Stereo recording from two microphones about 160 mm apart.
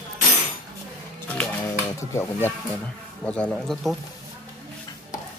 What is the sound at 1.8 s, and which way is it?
Speech, 15° left (ahead or behind).